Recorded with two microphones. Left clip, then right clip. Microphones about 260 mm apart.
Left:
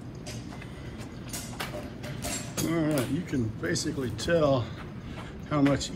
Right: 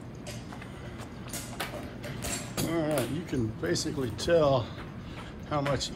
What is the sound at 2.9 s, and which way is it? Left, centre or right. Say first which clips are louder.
Speech: left 1 dB; centre.